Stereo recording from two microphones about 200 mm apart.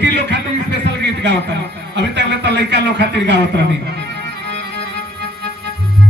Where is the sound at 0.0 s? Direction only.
60° right (ahead or behind).